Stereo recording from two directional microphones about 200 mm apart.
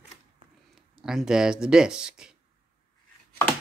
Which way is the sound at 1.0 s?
5° right (ahead or behind).